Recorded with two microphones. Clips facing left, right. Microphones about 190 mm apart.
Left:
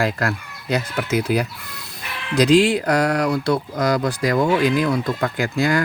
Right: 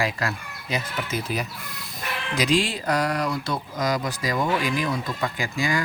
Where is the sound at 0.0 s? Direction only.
60° left (ahead or behind).